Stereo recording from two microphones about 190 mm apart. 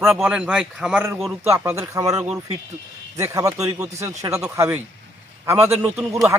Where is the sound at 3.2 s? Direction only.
15° right (ahead or behind).